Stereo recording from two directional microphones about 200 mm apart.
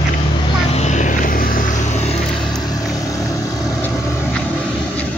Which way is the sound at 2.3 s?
Centre (ahead or behind).